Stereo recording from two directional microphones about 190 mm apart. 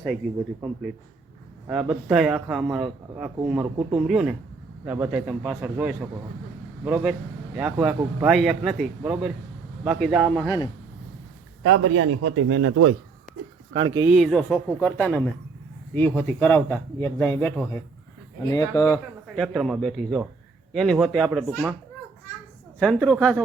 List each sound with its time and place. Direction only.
0.2 s a man's voice: centre (ahead or behind)
1.6 s a man's voice: 10° right (ahead or behind)
11.6 s a man's voice: 90° right
13.7 s speech: 25° right (ahead or behind)
14.1 s a man's voice: centre (ahead or behind); by 18.9 s 20° left (ahead or behind)
19.4 s a man's voice: centre (ahead or behind)
22.8 s a man's voice: 5° left (ahead or behind)